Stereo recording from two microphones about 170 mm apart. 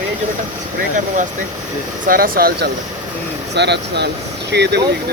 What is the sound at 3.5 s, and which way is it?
Speech, 80° right.